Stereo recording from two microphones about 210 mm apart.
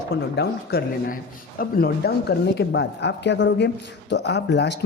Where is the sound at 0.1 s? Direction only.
50° left (ahead or behind).